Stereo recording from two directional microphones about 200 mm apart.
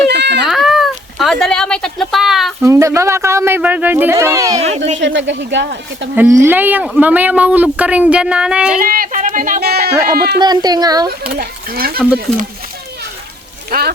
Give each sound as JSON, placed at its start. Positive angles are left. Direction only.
{"t": 0.1, "sound": "a sound", "side_deg": -60}
{"t": 0.4, "sound": "cat", "side_deg": 0}
{"t": 2.6, "sound": "speech", "side_deg": -15}
{"t": 4.9, "sound": "speech", "side_deg": -65}
{"t": 6.1, "sound": "speech", "side_deg": -10}
{"t": 8.8, "sound": "speech", "side_deg": -45}
{"t": 10.4, "sound": "a woman's voice", "side_deg": -20}
{"t": 11.3, "sound": "speech", "side_deg": -50}
{"t": 11.9, "sound": "speech", "side_deg": -5}
{"t": 13.7, "sound": "speech", "side_deg": -50}